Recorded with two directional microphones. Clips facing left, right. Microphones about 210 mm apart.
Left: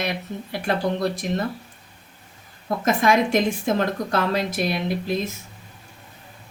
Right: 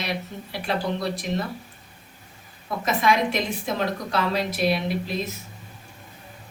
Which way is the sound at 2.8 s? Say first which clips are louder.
Left 3 dB; 45° left (ahead or behind).